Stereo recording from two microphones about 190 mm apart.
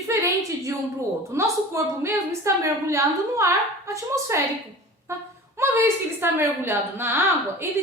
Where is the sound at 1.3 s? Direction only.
15° right (ahead or behind).